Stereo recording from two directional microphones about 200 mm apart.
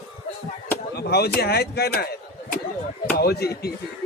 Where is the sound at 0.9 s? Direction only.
55° left (ahead or behind).